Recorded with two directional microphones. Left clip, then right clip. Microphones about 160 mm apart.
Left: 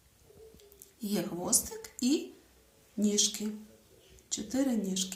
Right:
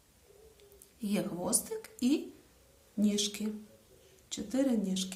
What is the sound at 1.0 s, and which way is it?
A woman's voice, 30° right (ahead or behind).